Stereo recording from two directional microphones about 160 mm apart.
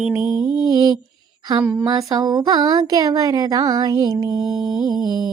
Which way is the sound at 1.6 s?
20° right (ahead or behind).